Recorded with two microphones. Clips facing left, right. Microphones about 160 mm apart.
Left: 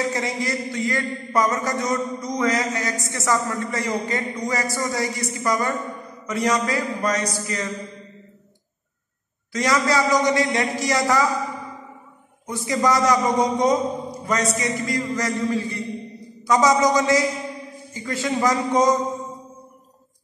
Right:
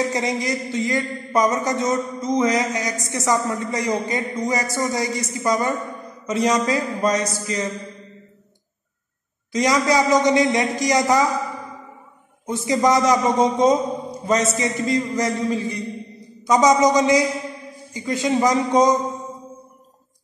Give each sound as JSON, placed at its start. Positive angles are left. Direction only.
{"t": 0.0, "sound": "a man's voice", "side_deg": -20}
{"t": 9.5, "sound": "a man's voice", "side_deg": -20}
{"t": 12.4, "sound": "a man's voice", "side_deg": -25}